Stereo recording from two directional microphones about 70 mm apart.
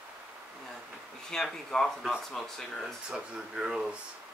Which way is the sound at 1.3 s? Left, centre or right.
Centre.